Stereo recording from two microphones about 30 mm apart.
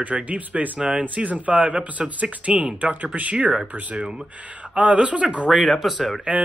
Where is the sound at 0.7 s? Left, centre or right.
Right.